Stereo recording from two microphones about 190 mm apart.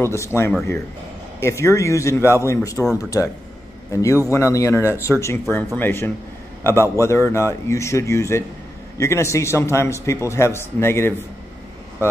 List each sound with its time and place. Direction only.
0.0 s a man's voice: 15° left (ahead or behind)